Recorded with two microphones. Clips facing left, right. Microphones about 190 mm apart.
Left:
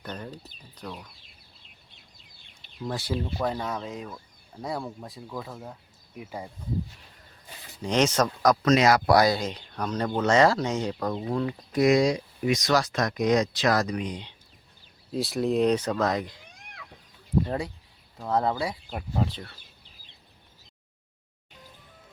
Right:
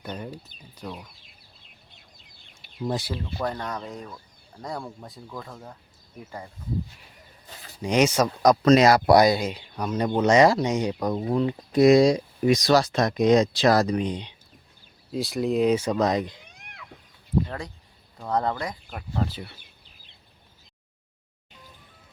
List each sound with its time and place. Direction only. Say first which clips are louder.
0.0 s speech: right 2 dB; 10° right (ahead or behind)
3.1 s speech: left 2 dB; 5° left (ahead or behind)
7.8 s speech: right 2 dB; 10° right (ahead or behind)
8.6 s speech: right 4 dB; 35° right (ahead or behind)
9.0 s speech: right 3 dB; 20° right (ahead or behind)
15.1 s speech: right 1 dB; centre (ahead or behind); by 16.3 s 20° right (ahead or behind)
18.2 s speech: even; 5° left (ahead or behind)
19.3 s speech: right 2 dB; 10° right (ahead or behind)